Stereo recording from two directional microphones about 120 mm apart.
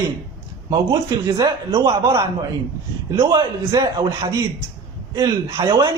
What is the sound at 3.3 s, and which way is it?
Speech, 35° right (ahead or behind).